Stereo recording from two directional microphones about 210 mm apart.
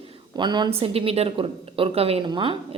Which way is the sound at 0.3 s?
20° right (ahead or behind).